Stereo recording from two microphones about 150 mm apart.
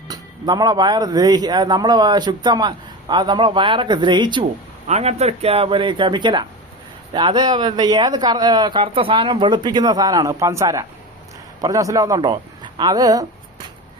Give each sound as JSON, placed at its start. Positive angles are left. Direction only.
{"t": 0.1, "sound": "speech", "side_deg": -25}
{"t": 4.9, "sound": "speech", "side_deg": -45}